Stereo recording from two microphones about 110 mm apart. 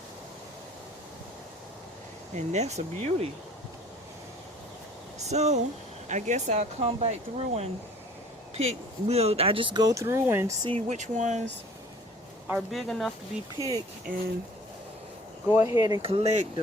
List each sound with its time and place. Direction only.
2.3 s speech: 90° right
5.3 s speech: 90° right; by 10.5 s 25° right (ahead or behind)
10.8 s speech: 90° right
12.5 s speech: centre (ahead or behind)
13.6 s speech: 30° left (ahead or behind)
15.4 s speech: 25° right (ahead or behind)
16.0 s speech: 60° right (ahead or behind); by 16.5 s 85° right